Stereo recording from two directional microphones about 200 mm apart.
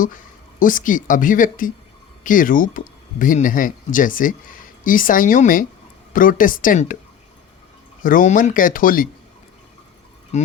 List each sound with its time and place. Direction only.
0.6 s speech: 40° left (ahead or behind)
8.0 s speech: 40° left (ahead or behind)
10.3 s speech: 35° left (ahead or behind)